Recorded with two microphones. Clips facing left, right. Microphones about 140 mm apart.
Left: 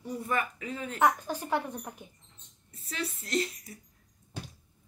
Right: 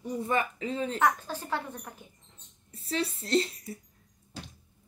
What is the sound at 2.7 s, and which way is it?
Speech, 30° right (ahead or behind).